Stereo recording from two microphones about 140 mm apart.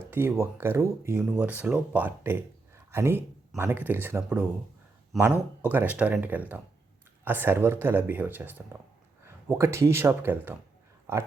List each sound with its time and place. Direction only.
0.0 s speech: 15° right (ahead or behind)
11.0 s dog: 20° right (ahead or behind)